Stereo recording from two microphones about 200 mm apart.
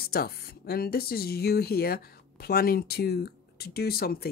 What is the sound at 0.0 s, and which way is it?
Speech, 50° left (ahead or behind).